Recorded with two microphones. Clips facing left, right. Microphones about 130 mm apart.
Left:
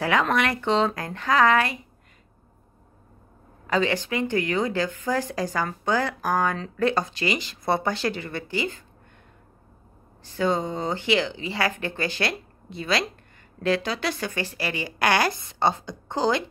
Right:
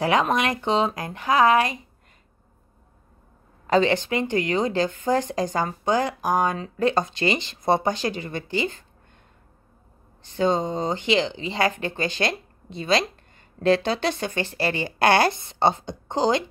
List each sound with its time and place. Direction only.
0.0 s speech: 20° right (ahead or behind)
3.6 s speech: 30° right (ahead or behind)
10.2 s speech: 20° right (ahead or behind)